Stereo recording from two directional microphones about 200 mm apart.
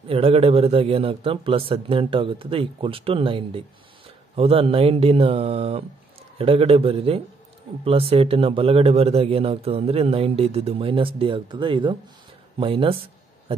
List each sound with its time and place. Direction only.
0.1 s speech: 30° right (ahead or behind)